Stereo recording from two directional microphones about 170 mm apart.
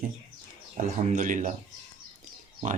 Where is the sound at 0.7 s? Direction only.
50° right (ahead or behind).